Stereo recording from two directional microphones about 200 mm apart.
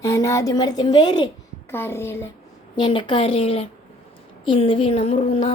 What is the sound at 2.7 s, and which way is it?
A woman's voice, 25° left (ahead or behind).